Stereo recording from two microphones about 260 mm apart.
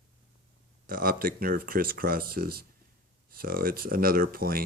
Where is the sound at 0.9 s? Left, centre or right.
Right.